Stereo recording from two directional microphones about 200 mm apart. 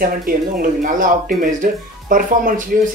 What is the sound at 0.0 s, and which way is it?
Speech, 45° right (ahead or behind).